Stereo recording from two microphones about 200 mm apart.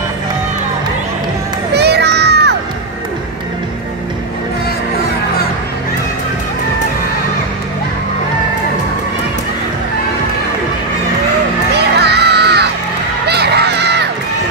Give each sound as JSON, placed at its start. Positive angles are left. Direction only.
{"t": 1.7, "sound": "a sound", "side_deg": -55}
{"t": 11.7, "sound": "music", "side_deg": -55}
{"t": 13.3, "sound": "honk", "side_deg": -55}